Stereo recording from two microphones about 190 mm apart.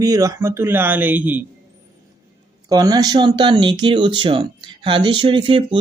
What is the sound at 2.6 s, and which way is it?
Speech, 20° right (ahead or behind).